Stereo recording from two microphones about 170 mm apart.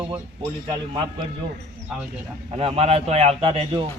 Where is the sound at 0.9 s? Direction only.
25° right (ahead or behind).